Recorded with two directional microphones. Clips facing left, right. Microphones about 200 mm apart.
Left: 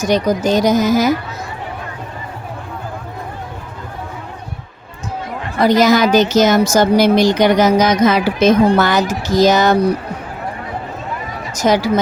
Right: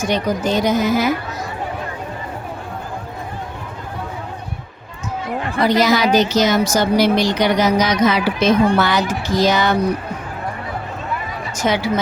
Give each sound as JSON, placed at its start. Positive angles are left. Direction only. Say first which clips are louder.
{"t": 0.0, "sound": "a woman's voice", "louder": "left 4 dB", "side_deg": 40}
{"t": 5.6, "sound": "a woman's voice", "louder": "left 4 dB", "side_deg": 45}
{"t": 11.5, "sound": "a woman's voice", "louder": "left 5 dB", "side_deg": 40}